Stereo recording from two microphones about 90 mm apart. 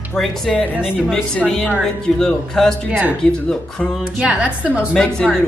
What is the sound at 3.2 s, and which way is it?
Speech, 10° left (ahead or behind).